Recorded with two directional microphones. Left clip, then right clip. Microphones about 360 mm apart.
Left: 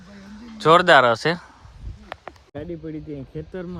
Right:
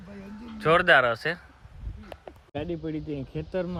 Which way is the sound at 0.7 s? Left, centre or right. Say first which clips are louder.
Left 6 dB; left.